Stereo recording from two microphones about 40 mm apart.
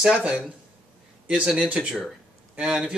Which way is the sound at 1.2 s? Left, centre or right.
Right.